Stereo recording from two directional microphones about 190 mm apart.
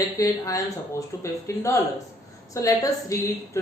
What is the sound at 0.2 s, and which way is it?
A woman's voice, 15° left (ahead or behind).